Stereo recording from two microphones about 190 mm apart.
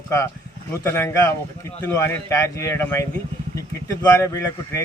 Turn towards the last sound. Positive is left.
turn(degrees=15)  # may be behind; listen again after turning